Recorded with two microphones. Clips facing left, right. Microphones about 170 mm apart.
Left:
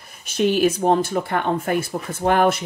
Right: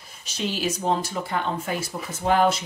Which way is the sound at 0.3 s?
55° left (ahead or behind).